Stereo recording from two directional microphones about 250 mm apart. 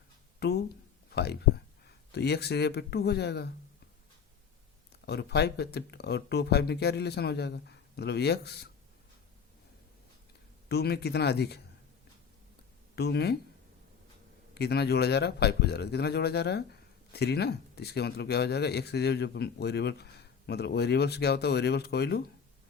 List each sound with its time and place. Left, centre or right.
0.3 s a sound: left
1.1 s speech: left
4.9 s speech: left
10.7 s speech: left
13.0 s speech: left
14.5 s speech: left